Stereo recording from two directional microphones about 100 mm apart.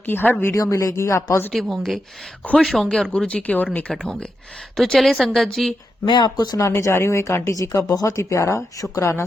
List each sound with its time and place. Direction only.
0.0 s speech: 20° left (ahead or behind)
0.5 s speech: 35° left (ahead or behind)
1.5 s a woman's voice: centre (ahead or behind)
6.1 s speech: 45° left (ahead or behind)
6.6 s speech: 30° left (ahead or behind)